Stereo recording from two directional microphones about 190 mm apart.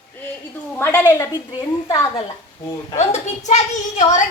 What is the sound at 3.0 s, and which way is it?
Speech, 35° left (ahead or behind).